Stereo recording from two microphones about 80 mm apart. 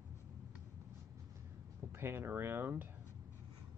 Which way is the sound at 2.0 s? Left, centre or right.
Right.